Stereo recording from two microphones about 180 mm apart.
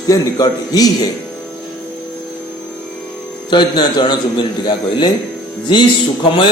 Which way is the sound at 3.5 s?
25° left (ahead or behind).